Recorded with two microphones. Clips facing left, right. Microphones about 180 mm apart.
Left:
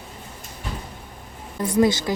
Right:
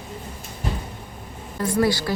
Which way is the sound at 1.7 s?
20° left (ahead or behind).